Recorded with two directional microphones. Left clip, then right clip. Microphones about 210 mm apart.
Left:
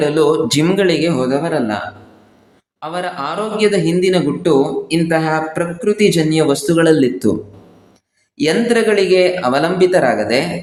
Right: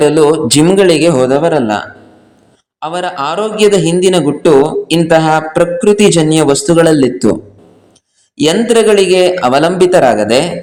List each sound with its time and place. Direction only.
0.0 s a man's voice: 25° right (ahead or behind)
2.8 s a man's voice: 25° right (ahead or behind)
8.4 s a man's voice: 25° right (ahead or behind)